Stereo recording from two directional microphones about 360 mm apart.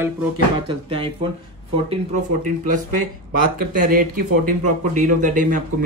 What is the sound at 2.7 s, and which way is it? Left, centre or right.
Speech, right.